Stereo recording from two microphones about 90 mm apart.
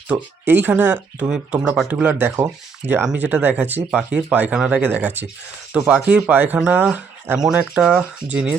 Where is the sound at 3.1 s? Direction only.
15° right (ahead or behind).